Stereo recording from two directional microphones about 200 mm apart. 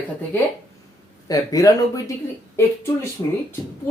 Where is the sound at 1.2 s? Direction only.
20° left (ahead or behind).